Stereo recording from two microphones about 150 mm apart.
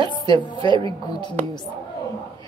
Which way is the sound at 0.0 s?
30° left (ahead or behind).